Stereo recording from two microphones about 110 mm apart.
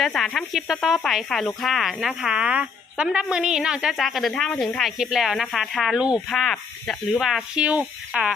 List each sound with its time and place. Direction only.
0.0 s speech: centre (ahead or behind)
6.2 s speech: centre (ahead or behind)